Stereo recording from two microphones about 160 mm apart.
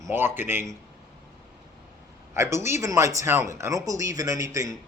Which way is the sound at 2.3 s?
15° right (ahead or behind).